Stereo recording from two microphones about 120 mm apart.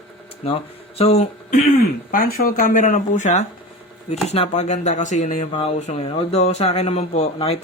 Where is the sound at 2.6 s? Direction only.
90° left.